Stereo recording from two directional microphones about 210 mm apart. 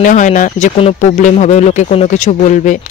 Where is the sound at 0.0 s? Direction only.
35° left (ahead or behind).